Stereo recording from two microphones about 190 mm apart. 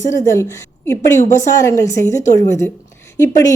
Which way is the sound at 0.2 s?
15° left (ahead or behind).